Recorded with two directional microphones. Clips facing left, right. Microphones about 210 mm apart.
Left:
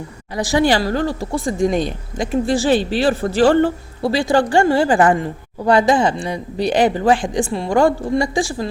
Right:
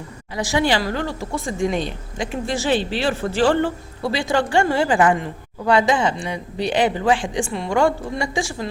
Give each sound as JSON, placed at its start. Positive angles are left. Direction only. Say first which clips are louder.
{"t": 0.3, "sound": "speech", "louder": "left 4 dB", "side_deg": 40}